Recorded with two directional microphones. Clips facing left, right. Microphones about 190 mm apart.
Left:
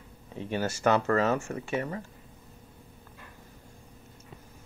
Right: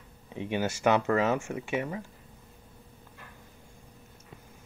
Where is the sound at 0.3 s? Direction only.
15° right (ahead or behind).